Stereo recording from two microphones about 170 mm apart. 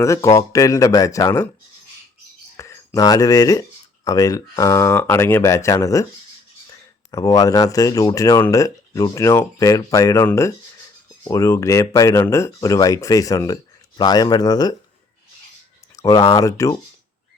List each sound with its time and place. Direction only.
0.0 s speech: 20° left (ahead or behind)
2.6 s speech: 20° left (ahead or behind)
7.1 s speech: 20° left (ahead or behind)
16.0 s speech: 20° left (ahead or behind)